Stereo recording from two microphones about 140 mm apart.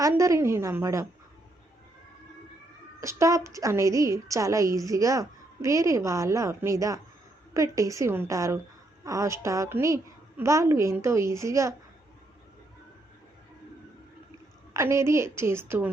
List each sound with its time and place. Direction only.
0.0 s a woman's voice: 20° right (ahead or behind)
3.0 s a woman's voice: 20° right (ahead or behind)
14.7 s a woman's voice: 20° right (ahead or behind)